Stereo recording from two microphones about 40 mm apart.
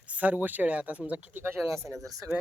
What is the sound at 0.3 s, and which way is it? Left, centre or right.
Speech, right.